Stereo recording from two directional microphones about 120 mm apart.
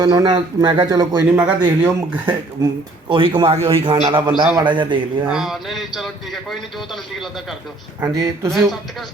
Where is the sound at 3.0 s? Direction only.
40° right (ahead or behind).